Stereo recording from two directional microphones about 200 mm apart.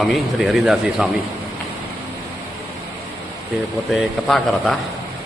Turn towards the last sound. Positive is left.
turn(degrees=0)  # may be behind; listen again after turning